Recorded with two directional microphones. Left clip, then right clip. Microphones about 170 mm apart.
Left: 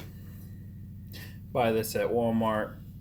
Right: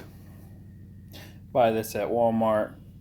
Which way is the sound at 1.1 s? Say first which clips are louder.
Right 6 dB; 35° right (ahead or behind).